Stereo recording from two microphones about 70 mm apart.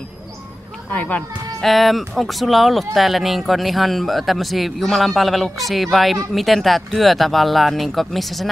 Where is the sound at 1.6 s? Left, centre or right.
Centre.